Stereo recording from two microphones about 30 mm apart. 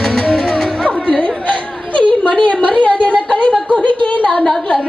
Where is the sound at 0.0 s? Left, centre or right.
Centre.